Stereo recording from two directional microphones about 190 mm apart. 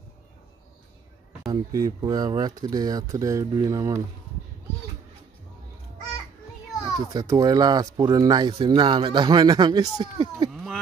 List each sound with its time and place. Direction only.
1.5 s a child's voice: 20° right (ahead or behind)
6.8 s a child's voice: 20° right (ahead or behind)
10.5 s a sound: centre (ahead or behind)